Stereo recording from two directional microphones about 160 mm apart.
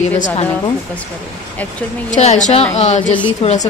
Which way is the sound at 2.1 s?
45° left (ahead or behind).